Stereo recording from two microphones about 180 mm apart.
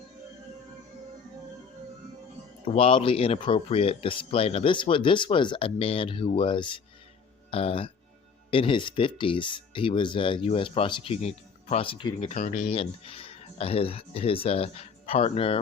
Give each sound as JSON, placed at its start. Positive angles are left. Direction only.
{"t": 2.6, "sound": "speech", "side_deg": 30}
{"t": 12.2, "sound": "speech", "side_deg": 40}